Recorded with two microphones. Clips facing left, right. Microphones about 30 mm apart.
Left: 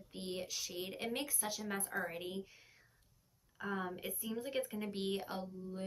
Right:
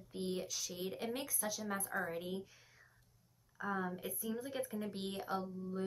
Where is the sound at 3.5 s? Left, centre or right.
Left.